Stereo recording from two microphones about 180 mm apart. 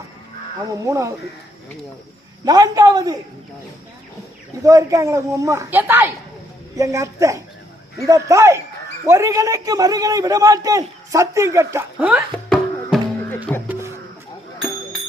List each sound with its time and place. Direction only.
0.7 s a man's voice: 20° right (ahead or behind)
2.4 s a man's voice: 20° right (ahead or behind)
4.6 s a man's voice: 20° right (ahead or behind)
12.3 s music: centre (ahead or behind)
13.7 s music: 15° right (ahead or behind)